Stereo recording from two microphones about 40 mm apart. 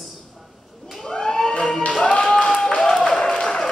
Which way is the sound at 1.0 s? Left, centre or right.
Centre.